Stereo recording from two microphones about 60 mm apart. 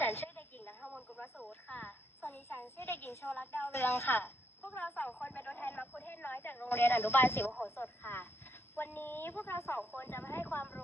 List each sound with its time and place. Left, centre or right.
0.1 s a sound: left
0.8 s radio: centre
2.2 s speech: left